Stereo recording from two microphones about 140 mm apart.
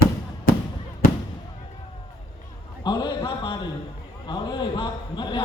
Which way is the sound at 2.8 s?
35° left (ahead or behind).